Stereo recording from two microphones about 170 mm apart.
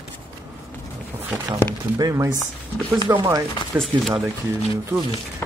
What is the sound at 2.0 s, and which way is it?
Speech, 20° right (ahead or behind).